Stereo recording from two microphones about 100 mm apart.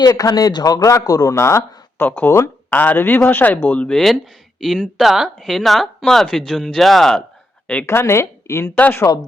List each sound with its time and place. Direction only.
0.0 s speech: 40° left (ahead or behind)
2.0 s speech: 15° left (ahead or behind)
7.9 s a woman's voice: 25° left (ahead or behind)
8.7 s speech: 15° left (ahead or behind)